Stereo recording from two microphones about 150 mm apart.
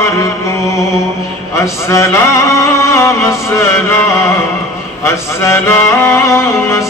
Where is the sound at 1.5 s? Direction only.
20° left (ahead or behind).